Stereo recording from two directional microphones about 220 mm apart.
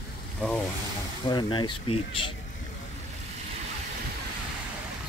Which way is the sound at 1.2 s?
20° left (ahead or behind).